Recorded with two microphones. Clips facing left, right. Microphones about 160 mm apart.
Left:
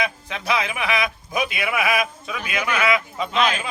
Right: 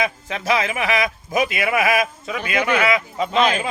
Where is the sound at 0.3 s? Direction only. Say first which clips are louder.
Right 3 dB; 40° right (ahead or behind).